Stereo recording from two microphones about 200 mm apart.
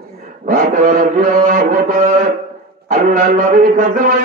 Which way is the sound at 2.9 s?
40° right (ahead or behind).